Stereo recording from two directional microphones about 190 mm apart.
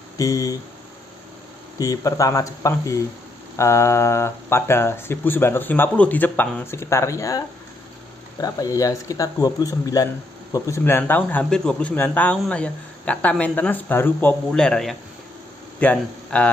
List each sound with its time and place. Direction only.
0.2 s speech: 15° left (ahead or behind)
1.8 s speech: 20° left (ahead or behind)